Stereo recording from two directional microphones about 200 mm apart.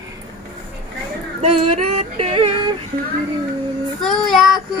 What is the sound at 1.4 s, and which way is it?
Yodeling, 30° right (ahead or behind).